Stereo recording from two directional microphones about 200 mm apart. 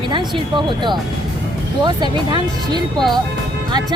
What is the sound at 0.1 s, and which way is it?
Speech, 25° right (ahead or behind).